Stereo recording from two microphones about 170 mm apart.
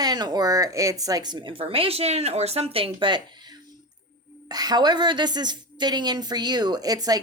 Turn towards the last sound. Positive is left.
turn(degrees=-20)  # may be behind; listen again after turning